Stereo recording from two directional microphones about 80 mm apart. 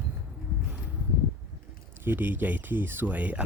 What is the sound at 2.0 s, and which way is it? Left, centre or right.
Speech, right.